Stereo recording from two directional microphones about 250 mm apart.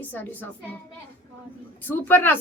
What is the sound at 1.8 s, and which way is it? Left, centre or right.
Speech, centre.